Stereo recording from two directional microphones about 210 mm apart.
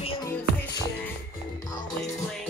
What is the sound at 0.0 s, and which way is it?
Music, 25° left (ahead or behind).